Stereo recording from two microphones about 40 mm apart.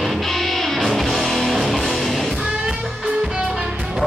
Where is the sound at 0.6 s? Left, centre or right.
Centre.